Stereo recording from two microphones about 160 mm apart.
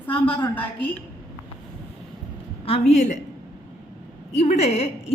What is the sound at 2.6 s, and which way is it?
Speech, 40° left (ahead or behind).